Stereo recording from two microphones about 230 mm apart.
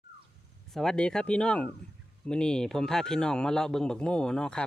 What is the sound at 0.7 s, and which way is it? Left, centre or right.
Speech, centre.